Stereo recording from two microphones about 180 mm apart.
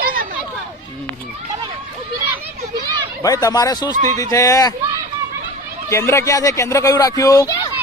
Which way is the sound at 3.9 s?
45° right (ahead or behind).